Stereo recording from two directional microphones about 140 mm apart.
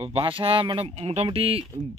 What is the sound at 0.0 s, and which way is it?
Speech, 45° right (ahead or behind).